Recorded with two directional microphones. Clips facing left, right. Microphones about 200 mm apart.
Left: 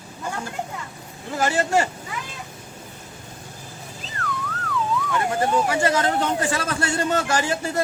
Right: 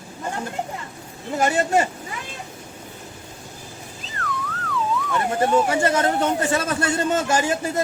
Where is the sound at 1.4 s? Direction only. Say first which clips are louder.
Right 1 dB; 20° right (ahead or behind).